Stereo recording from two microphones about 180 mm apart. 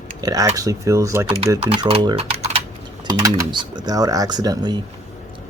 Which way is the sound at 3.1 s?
20° right (ahead or behind).